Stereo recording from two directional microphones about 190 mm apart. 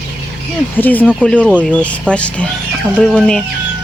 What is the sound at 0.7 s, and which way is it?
Speech, 10° left (ahead or behind).